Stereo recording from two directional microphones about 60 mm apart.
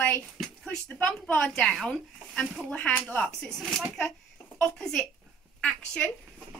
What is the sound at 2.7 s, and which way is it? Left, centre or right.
Speech, left.